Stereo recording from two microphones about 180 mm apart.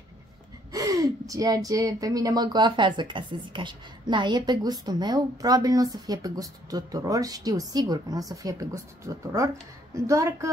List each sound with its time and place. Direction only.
0.7 s a woman's voice: 20° right (ahead or behind)